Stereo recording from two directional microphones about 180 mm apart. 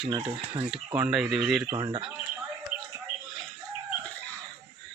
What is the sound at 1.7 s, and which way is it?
Speech, 25° right (ahead or behind).